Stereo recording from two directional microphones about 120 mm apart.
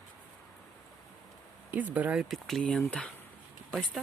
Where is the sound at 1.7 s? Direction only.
15° right (ahead or behind).